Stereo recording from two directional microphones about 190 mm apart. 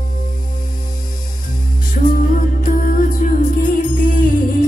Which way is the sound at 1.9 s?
45° left (ahead or behind).